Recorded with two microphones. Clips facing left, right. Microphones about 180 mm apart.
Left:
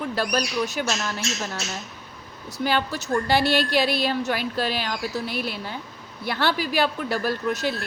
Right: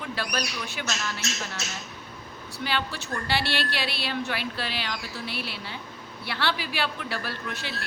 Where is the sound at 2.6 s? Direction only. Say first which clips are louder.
Left 6 dB; 45° left (ahead or behind).